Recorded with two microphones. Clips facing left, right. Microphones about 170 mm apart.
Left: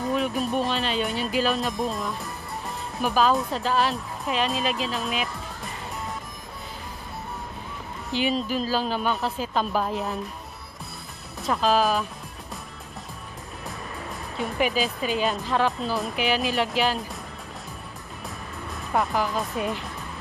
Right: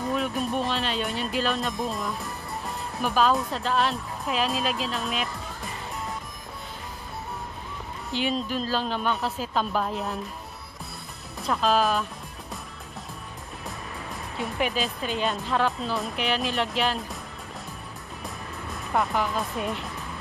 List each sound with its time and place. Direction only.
0.0 s speech: centre (ahead or behind)
8.1 s speech: centre (ahead or behind)
11.4 s speech: centre (ahead or behind)
14.4 s speech: centre (ahead or behind)
18.9 s speech: centre (ahead or behind)